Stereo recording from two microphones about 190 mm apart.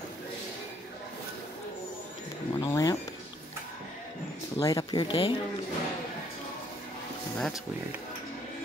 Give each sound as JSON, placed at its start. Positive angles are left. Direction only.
{"t": 2.5, "sound": "a sound", "side_deg": 20}
{"t": 4.6, "sound": "speech", "side_deg": 20}
{"t": 7.3, "sound": "speech", "side_deg": 5}